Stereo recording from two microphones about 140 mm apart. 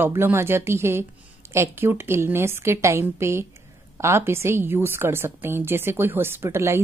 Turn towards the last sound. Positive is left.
turn(degrees=-20)  # may be behind; listen again after turning